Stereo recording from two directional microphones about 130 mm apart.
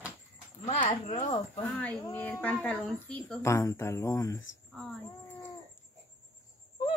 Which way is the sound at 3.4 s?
25° left (ahead or behind).